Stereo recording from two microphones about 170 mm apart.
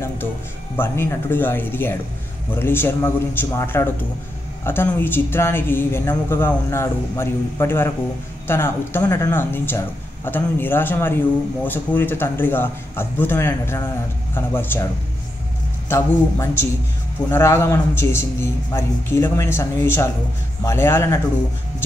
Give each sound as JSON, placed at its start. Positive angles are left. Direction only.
{"t": 0.7, "sound": "a woman's voice", "side_deg": 15}
{"t": 15.9, "sound": "a woman's voice", "side_deg": 15}